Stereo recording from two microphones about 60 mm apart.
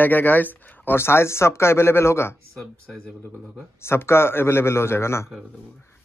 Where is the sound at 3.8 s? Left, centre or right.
Left.